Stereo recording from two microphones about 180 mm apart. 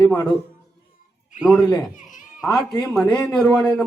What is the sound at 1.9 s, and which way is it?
Speech, 45° left (ahead or behind).